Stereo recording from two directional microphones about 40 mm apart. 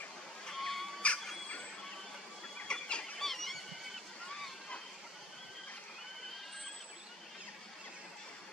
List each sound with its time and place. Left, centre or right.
0.5 s goat: centre
1.0 s music: left
2.7 s a sound: left
3.2 s squeal: centre